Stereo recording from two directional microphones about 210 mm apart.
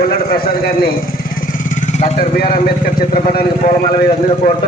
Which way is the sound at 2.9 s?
45° left (ahead or behind).